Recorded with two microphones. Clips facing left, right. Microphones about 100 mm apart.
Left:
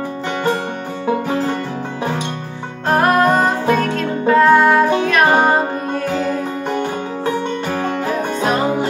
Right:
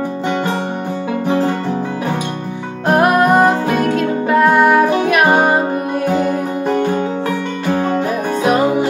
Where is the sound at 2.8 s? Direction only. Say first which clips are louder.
Right 2 dB; 15° right (ahead or behind).